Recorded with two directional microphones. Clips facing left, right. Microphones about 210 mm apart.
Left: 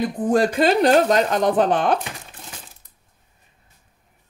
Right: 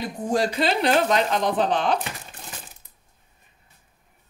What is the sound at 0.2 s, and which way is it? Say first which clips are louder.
Speech: left 5 dB; 55° left (ahead or behind).